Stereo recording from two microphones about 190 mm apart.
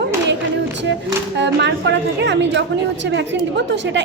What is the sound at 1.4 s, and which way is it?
A woman's voice, 65° right (ahead or behind).